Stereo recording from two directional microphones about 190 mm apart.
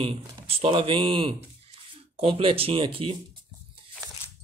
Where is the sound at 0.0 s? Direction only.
30° right (ahead or behind).